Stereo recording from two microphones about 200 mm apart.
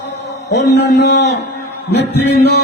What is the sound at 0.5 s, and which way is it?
A man's voice, 60° left (ahead or behind).